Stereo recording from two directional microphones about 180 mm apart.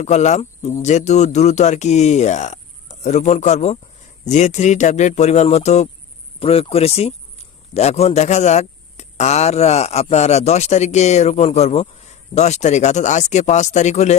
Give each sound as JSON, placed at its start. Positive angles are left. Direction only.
{"t": 0.0, "sound": "speech", "side_deg": 40}